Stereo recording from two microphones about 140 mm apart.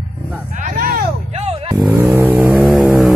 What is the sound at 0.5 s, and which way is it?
Vehicle, 70° right (ahead or behind).